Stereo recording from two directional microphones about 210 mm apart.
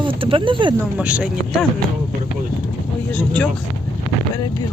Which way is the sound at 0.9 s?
5° right (ahead or behind).